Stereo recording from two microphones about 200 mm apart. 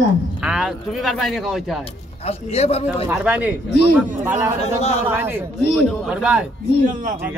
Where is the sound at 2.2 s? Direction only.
30° left (ahead or behind).